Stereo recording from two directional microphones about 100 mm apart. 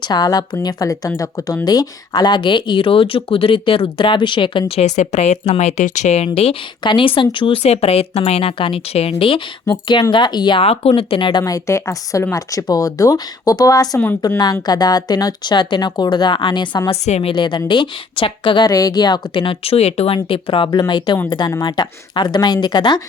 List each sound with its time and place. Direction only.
0.0 s speech: 45° left (ahead or behind)
5.5 s speech: 90° left
6.8 s speech: 60° left (ahead or behind)
10.6 s speech: 75° left (ahead or behind); by 11.4 s 55° left (ahead or behind)
11.4 s speech: 30° left (ahead or behind); by 16.9 s 50° left (ahead or behind)
16.9 s a woman's voice: 85° left
17.3 s speech: 55° left (ahead or behind)
18.7 s speech: 35° left (ahead or behind); by 20.1 s 90° left
20.2 s speech: 60° left (ahead or behind)
20.7 s speech: 45° left (ahead or behind)